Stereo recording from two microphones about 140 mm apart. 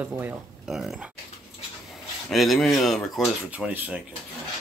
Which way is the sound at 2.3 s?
Centre (ahead or behind).